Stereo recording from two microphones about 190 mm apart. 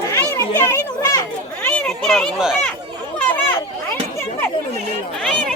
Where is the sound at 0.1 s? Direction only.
15° left (ahead or behind).